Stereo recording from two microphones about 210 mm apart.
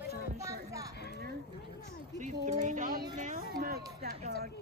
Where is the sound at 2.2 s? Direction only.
35° right (ahead or behind).